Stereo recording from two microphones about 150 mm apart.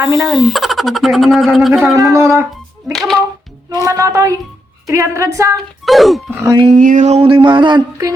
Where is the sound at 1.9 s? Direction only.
20° right (ahead or behind).